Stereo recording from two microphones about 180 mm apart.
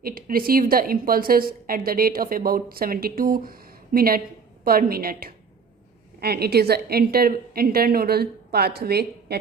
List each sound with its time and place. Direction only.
0.0 s a woman's voice: 55° right (ahead or behind)